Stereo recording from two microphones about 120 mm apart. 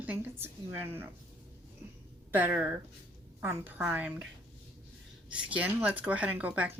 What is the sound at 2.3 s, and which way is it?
Speech, 15° right (ahead or behind).